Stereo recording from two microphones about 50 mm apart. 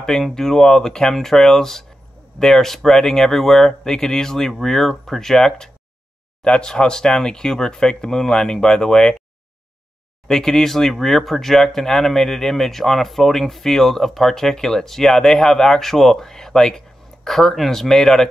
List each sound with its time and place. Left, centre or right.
0.0 s speech: centre
10.2 s speech: centre